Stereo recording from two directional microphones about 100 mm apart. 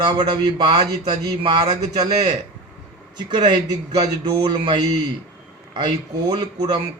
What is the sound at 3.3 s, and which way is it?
A man's voice, 45° right (ahead or behind).